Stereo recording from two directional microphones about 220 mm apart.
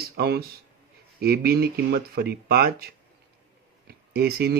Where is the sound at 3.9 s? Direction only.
45° right (ahead or behind).